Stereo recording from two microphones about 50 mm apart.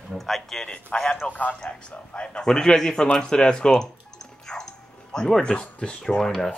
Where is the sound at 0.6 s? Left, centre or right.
Left.